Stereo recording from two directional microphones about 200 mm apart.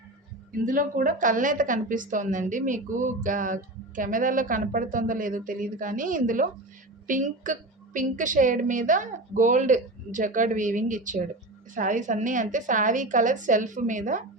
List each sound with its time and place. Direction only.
0.6 s a woman's voice: 40° right (ahead or behind)